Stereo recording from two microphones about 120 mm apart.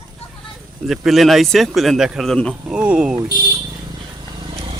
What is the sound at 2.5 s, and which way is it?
Speech, 10° right (ahead or behind).